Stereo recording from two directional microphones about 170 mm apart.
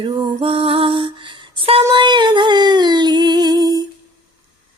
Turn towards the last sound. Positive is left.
turn(degrees=-25)  # may be behind; listen again after turning